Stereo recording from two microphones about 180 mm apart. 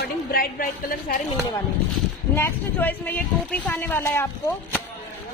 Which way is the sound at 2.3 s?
10° left (ahead or behind).